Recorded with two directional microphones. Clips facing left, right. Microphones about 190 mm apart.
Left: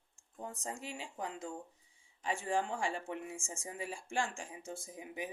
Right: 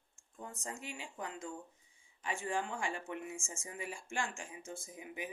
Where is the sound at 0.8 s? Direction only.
35° left (ahead or behind).